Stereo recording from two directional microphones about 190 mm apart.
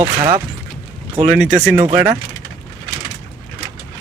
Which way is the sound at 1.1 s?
5° right (ahead or behind).